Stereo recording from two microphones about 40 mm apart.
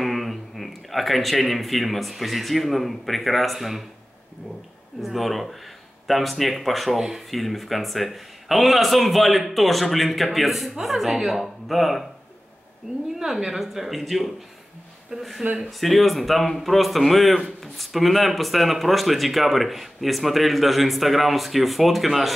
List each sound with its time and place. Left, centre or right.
0.0 s a man's voice: centre
5.0 s a man's voice: centre
13.2 s a man's voice: centre
15.1 s speech: right
15.8 s a man's voice: centre